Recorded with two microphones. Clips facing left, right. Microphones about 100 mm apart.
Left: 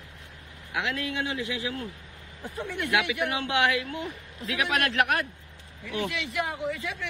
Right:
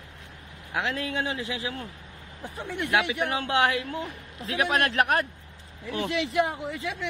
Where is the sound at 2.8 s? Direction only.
25° right (ahead or behind).